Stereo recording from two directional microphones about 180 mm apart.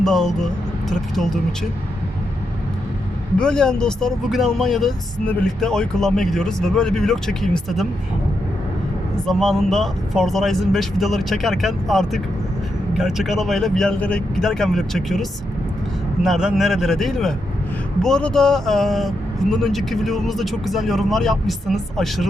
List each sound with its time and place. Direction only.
0.0 s speech: centre (ahead or behind)
3.3 s speech: 5° left (ahead or behind)
9.2 s speech: centre (ahead or behind)